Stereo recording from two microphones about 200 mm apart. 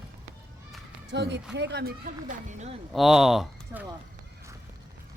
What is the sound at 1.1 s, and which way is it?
A man's voice, 60° right (ahead or behind).